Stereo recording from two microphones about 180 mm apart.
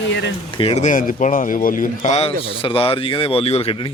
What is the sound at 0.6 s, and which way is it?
Speech, 35° left (ahead or behind).